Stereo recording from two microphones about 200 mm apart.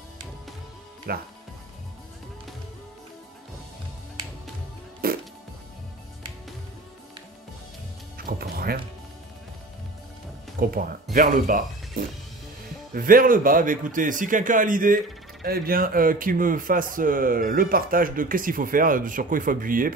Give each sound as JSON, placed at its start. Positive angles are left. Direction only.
{"t": 1.1, "sound": "speech", "side_deg": -50}
{"t": 5.0, "sound": "music", "side_deg": -50}
{"t": 8.2, "sound": "music", "side_deg": -50}
{"t": 10.6, "sound": "speech", "side_deg": -45}